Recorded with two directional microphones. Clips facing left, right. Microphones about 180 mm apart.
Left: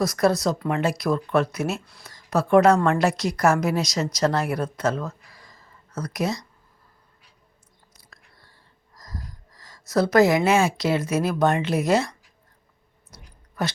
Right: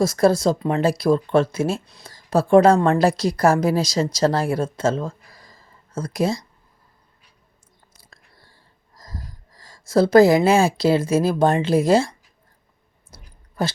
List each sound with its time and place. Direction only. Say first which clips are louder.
0.0 s a woman's voice: right 4 dB; 30° right (ahead or behind)
1.8 s a woman's voice: right 1 dB; 20° right (ahead or behind)
2.0 s a woman's voice: right 4 dB; 30° right (ahead or behind)
5.3 s a sound: right 1 dB; 35° right (ahead or behind)
7.9 s whispering: right 1 dB; 30° right (ahead or behind)
9.0 s speech: right 1 dB; 30° right (ahead or behind)
13.1 s clicking: right 1 dB; 30° right (ahead or behind)